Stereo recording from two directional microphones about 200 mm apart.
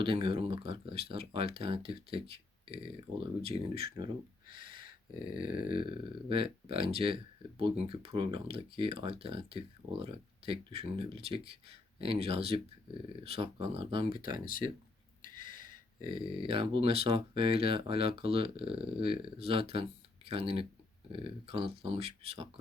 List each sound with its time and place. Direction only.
0.0 s speech: 25° right (ahead or behind)
5.3 s grunt: 45° left (ahead or behind)
6.2 s speech: 25° right (ahead or behind)
14.3 s grunt: 45° left (ahead or behind)
16.0 s speech: 25° right (ahead or behind)